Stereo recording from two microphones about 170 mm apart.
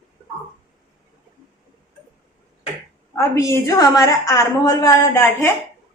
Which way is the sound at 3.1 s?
15° left (ahead or behind).